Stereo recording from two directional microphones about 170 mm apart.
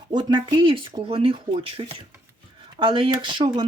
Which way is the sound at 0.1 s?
25° right (ahead or behind).